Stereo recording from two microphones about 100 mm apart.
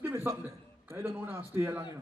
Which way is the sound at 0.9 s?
25° right (ahead or behind).